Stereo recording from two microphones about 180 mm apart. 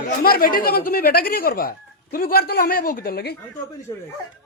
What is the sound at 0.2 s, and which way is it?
Speech, 55° left (ahead or behind).